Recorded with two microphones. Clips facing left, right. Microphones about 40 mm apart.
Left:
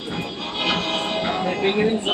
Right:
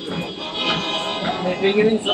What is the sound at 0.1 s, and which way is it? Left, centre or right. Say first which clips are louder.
Music: right 1 dB; centre.